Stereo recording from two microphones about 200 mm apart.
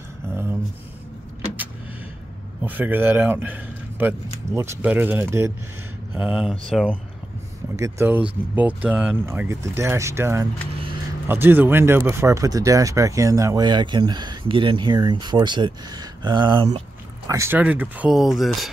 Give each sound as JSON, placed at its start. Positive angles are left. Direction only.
{"t": 0.3, "sound": "a sound", "side_deg": -10}
{"t": 2.6, "sound": "speech", "side_deg": -10}
{"t": 7.7, "sound": "speech", "side_deg": -15}
{"t": 17.3, "sound": "speech", "side_deg": -10}